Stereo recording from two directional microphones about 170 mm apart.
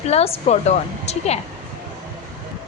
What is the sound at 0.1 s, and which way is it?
A woman's voice, 40° left (ahead or behind).